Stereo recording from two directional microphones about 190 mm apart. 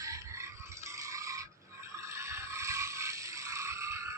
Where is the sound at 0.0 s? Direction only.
15° right (ahead or behind).